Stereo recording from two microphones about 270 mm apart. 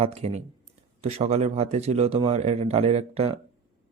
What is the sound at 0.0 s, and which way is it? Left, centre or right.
A man's voice, right.